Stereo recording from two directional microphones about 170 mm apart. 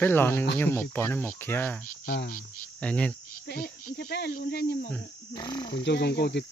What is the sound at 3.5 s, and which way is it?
Speech, 60° left (ahead or behind).